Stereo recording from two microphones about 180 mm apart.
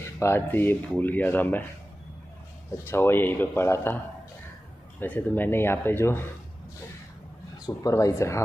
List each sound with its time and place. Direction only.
0.0 s speech: 15° left (ahead or behind)
2.8 s speech: 10° left (ahead or behind)
5.0 s speech: 10° left (ahead or behind)
7.5 s speech: 20° left (ahead or behind)